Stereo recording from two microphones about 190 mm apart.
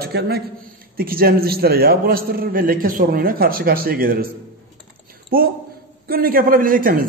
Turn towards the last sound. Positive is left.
turn(degrees=-45)  # may be behind; listen again after turning